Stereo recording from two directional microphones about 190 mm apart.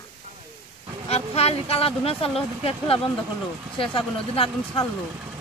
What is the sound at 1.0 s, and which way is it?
Speech, 30° left (ahead or behind).